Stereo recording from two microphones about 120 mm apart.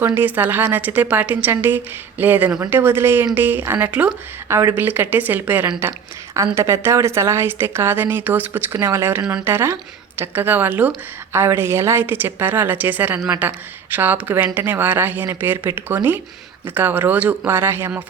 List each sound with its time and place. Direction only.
0.0 s a woman's voice: 15° right (ahead or behind)